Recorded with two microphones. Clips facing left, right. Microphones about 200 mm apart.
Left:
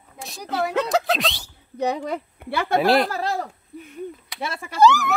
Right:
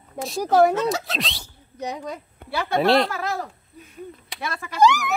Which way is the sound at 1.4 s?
70° left (ahead or behind).